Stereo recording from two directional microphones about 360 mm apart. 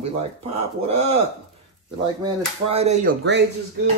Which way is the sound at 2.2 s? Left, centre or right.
Centre.